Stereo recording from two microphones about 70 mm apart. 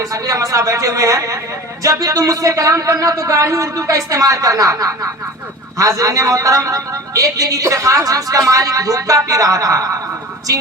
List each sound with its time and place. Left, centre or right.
0.0 s a man's voice: right